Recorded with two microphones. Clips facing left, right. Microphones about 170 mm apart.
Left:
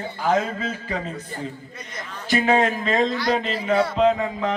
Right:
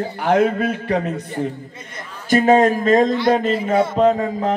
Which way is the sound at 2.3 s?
45° right (ahead or behind).